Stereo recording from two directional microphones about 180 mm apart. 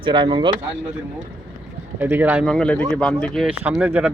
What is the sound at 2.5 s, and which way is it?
Speech, 5° left (ahead or behind).